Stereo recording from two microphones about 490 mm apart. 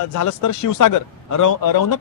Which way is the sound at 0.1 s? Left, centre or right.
Left.